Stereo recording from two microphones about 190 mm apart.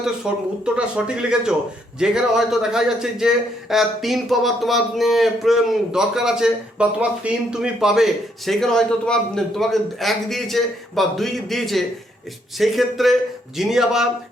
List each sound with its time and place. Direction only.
0.0 s a man's voice: 5° right (ahead or behind)